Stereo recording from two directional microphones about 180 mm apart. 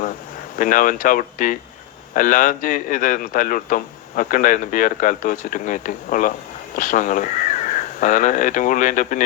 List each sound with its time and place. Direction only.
0.5 s a man's voice: 50° left (ahead or behind)